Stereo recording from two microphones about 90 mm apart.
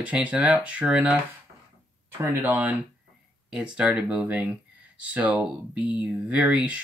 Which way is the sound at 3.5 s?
10° right (ahead or behind).